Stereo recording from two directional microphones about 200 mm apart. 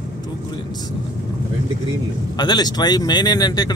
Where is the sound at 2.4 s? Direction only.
20° left (ahead or behind).